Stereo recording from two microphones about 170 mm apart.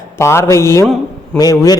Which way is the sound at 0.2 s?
15° left (ahead or behind).